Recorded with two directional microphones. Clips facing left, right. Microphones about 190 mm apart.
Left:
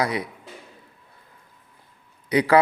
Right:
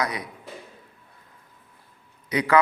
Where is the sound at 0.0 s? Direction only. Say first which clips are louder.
Left 4 dB; 30° left (ahead or behind).